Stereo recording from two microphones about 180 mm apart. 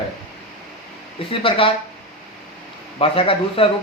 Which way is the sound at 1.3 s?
30° left (ahead or behind).